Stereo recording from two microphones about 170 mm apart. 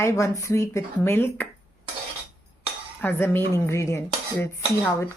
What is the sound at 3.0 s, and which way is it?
Speech, 10° left (ahead or behind).